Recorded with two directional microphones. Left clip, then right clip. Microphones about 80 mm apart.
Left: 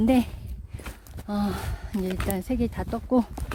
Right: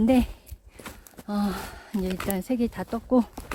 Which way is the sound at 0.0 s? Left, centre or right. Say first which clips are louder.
Right 1 dB; centre.